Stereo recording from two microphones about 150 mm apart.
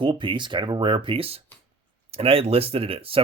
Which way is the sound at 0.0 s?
35° right (ahead or behind).